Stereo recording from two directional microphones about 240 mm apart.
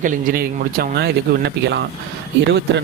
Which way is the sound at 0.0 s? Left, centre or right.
Right.